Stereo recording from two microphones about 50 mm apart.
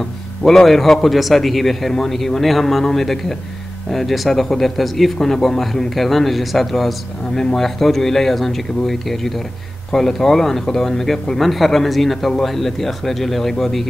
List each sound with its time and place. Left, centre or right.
0.4 s speech: centre